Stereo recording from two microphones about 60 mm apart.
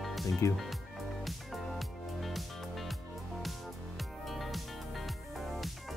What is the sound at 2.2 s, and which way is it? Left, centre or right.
Music, centre.